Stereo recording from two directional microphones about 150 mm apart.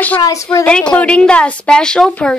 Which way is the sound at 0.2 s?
20° left (ahead or behind).